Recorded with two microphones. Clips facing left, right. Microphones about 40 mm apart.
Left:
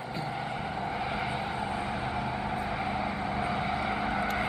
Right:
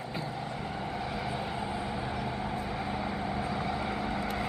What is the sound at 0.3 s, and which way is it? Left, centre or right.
Vehicle, left.